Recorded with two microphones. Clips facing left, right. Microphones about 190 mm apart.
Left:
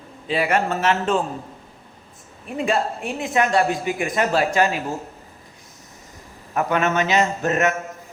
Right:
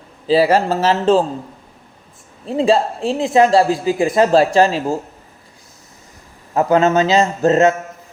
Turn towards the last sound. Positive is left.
turn(degrees=-25)  # may be behind; listen again after turning